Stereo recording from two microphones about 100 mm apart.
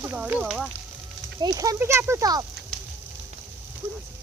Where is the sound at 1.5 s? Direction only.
35° right (ahead or behind).